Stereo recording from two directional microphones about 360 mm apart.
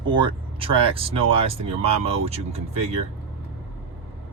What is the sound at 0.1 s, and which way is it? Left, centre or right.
Speech, centre.